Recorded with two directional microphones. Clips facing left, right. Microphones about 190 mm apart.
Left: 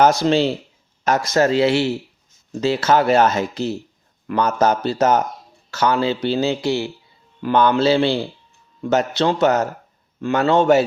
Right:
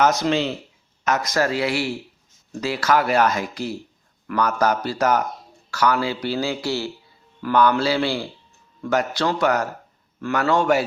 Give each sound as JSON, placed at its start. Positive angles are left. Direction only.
{"t": 0.0, "sound": "speech", "side_deg": 30}